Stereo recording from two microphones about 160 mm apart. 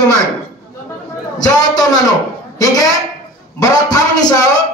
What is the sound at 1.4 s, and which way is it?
Speech, 25° left (ahead or behind).